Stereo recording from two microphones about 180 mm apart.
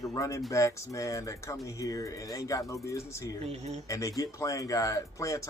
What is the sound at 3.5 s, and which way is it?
Speech, 35° right (ahead or behind).